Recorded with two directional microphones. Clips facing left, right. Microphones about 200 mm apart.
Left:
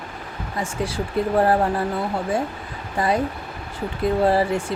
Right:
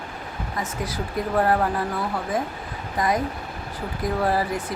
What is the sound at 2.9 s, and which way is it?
Speech, 30° left (ahead or behind).